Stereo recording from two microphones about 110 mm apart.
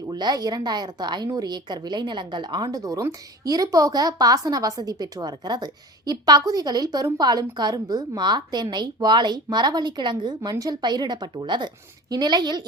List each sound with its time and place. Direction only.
0.1 s a woman's voice: 40° right (ahead or behind)